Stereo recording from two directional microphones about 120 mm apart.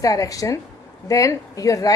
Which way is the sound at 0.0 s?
30° left (ahead or behind).